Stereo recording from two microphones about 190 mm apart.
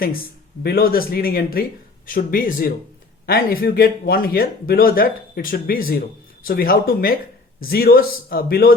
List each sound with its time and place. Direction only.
0.6 s speech: 55° left (ahead or behind)